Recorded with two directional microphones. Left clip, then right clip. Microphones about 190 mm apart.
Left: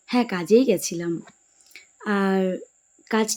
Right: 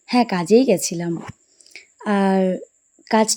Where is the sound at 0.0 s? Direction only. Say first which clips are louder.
Right 5 dB; 15° right (ahead or behind).